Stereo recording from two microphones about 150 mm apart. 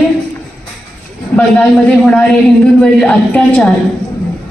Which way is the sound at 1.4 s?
5° left (ahead or behind).